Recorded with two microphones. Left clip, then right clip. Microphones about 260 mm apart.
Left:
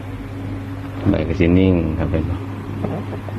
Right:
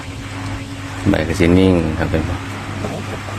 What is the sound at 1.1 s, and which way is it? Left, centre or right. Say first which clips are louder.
Speech: right 3 dB; centre.